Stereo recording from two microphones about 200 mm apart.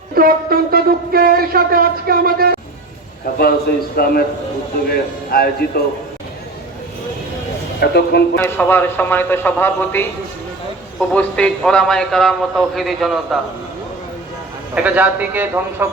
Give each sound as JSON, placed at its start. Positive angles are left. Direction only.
{"t": 0.1, "sound": "a sound", "side_deg": -50}
{"t": 3.9, "sound": "a man's voice", "side_deg": 50}
{"t": 7.8, "sound": "a man's voice", "side_deg": 55}
{"t": 8.4, "sound": "a man's voice", "side_deg": 10}
{"t": 11.1, "sound": "a man's voice", "side_deg": 5}
{"t": 14.8, "sound": "a man's voice", "side_deg": -5}